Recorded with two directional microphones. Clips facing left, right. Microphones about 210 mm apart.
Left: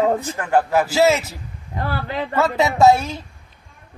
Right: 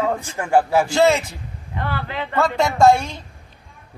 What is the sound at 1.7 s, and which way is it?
Speech, 40° left (ahead or behind).